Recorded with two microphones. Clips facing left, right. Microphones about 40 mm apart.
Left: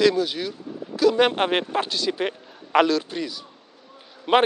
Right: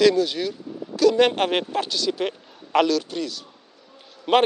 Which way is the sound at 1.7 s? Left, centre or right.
Left.